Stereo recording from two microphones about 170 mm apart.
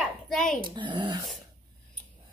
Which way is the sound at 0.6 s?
30° right (ahead or behind).